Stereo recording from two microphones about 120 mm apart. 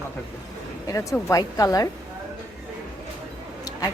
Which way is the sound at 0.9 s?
25° left (ahead or behind).